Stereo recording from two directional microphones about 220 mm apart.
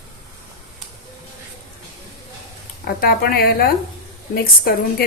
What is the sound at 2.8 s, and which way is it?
A woman's voice, 45° left (ahead or behind).